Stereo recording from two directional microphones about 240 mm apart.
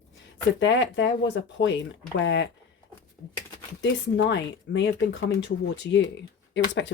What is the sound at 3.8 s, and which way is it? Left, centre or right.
Speech, left.